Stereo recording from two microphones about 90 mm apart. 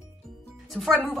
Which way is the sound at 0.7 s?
Centre (ahead or behind).